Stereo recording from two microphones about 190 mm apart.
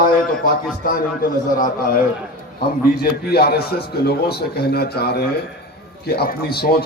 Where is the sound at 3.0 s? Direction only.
55° left (ahead or behind).